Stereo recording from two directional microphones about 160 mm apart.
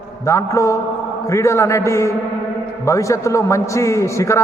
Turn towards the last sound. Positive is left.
turn(degrees=20)  # may be behind; listen again after turning